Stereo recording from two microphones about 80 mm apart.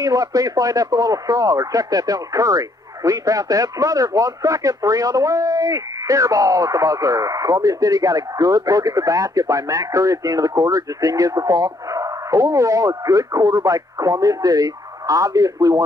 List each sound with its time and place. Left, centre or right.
0.0 s speech: right